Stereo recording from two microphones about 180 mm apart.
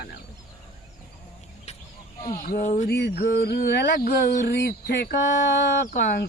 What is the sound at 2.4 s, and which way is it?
Speech, 50° left (ahead or behind).